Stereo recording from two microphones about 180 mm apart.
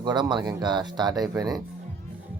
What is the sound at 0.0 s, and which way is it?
Speech, 25° right (ahead or behind).